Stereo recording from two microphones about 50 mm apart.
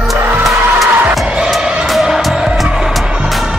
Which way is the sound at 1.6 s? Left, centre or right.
Centre.